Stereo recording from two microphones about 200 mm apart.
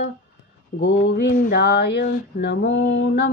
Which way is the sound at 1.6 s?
55° left (ahead or behind).